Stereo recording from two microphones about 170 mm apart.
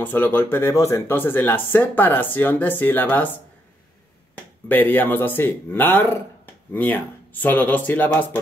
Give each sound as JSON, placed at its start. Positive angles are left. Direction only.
{"t": 0.0, "sound": "speech", "side_deg": 10}
{"t": 4.6, "sound": "speech", "side_deg": 10}